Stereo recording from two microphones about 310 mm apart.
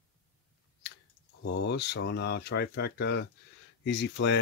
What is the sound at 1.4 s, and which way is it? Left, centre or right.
Speech, left.